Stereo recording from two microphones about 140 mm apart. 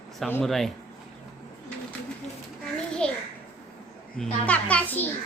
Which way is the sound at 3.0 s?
5° left (ahead or behind).